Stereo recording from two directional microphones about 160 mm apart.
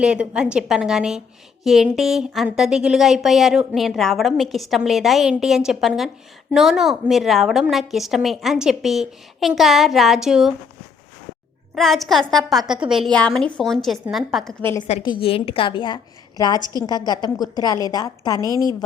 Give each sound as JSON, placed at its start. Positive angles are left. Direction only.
{"t": 0.0, "sound": "speech", "side_deg": -5}
{"t": 11.7, "sound": "speech", "side_deg": 0}
{"t": 15.0, "sound": "a woman's voice", "side_deg": 30}
{"t": 18.3, "sound": "a woman's voice", "side_deg": -25}